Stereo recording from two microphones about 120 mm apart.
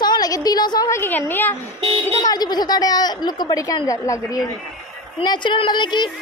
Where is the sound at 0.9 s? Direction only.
20° left (ahead or behind).